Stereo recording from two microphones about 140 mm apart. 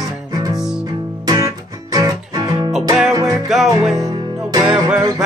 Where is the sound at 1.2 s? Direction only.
30° right (ahead or behind).